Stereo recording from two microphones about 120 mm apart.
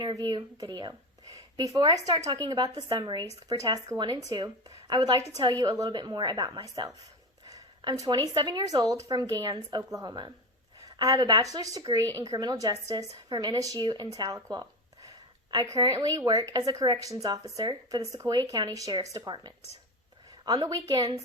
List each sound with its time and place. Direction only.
0.0 s a woman's voice: 35° right (ahead or behind)